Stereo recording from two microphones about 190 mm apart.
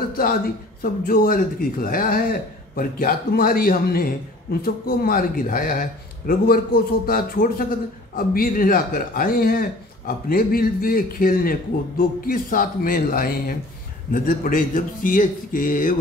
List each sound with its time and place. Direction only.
0.8 s speech: 50° left (ahead or behind)